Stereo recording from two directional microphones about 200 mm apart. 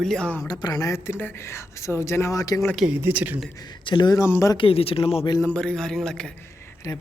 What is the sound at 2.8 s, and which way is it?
Speech, 5° right (ahead or behind).